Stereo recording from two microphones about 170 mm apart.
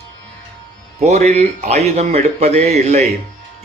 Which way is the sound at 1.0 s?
40° right (ahead or behind).